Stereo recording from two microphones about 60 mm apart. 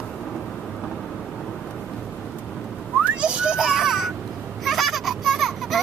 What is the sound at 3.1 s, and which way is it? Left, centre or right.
Children playing, centre.